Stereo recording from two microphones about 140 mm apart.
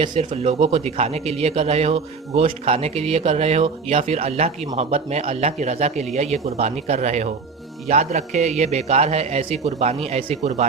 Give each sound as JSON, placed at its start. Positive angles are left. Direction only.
{"t": 0.3, "sound": "a man's voice", "side_deg": -45}